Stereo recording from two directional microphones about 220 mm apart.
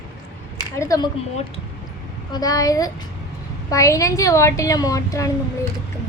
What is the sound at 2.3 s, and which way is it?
A woman's voice, 15° left (ahead or behind).